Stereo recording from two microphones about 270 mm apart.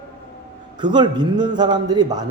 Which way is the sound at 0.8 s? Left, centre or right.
Centre.